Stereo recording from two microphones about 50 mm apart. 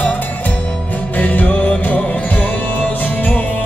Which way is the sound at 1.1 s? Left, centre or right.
Left.